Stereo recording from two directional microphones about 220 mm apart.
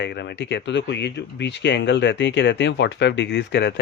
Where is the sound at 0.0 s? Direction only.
50° left (ahead or behind).